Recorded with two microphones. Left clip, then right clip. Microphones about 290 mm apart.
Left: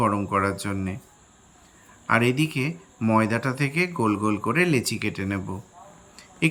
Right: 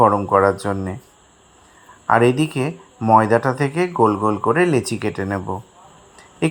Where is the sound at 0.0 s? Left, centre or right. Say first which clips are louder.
Right 9 dB; centre.